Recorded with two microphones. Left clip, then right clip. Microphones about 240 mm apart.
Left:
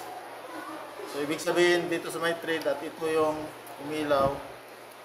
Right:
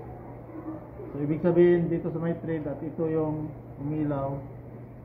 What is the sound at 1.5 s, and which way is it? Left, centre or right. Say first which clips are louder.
A man's voice: right 2 dB; left.